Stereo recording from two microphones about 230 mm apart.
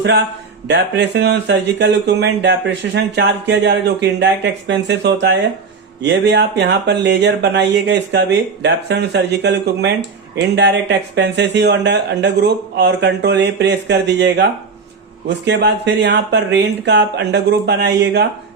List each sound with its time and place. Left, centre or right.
0.7 s speech: right